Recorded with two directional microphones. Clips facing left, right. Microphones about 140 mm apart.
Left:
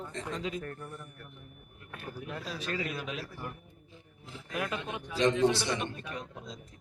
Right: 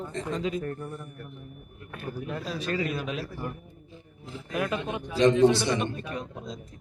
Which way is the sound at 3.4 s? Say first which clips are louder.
Right 6 dB; 35° right (ahead or behind).